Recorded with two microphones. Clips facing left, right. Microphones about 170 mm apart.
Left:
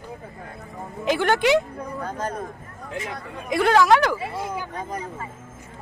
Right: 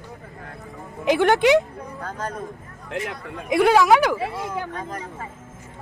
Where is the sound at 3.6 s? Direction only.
5° right (ahead or behind).